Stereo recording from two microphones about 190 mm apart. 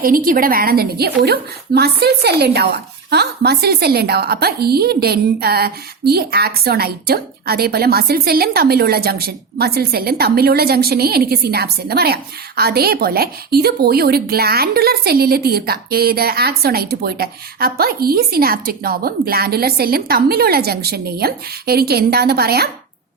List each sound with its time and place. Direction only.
0.0 s a woman's voice: 50° right (ahead or behind)